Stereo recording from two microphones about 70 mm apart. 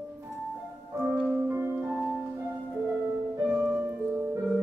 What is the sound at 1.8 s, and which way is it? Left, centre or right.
Music, centre.